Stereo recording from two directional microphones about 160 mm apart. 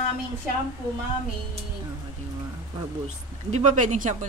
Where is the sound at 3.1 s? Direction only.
45° right (ahead or behind).